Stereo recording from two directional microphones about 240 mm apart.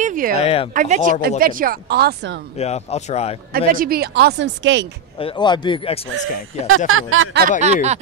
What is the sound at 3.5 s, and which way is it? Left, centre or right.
Speech, right.